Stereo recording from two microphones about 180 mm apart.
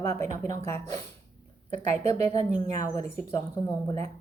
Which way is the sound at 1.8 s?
40° right (ahead or behind).